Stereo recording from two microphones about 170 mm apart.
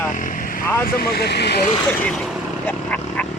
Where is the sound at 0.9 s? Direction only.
70° left (ahead or behind).